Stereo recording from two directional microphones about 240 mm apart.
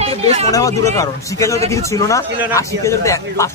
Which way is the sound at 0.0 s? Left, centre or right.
Right.